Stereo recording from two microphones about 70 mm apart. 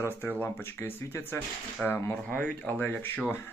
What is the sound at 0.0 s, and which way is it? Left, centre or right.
Speech, left.